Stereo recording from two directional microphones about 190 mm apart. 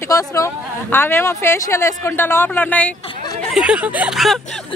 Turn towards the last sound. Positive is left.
turn(degrees=0)  # may be behind; listen again after turning